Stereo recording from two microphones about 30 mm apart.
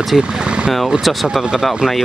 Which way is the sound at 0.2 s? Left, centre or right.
Right.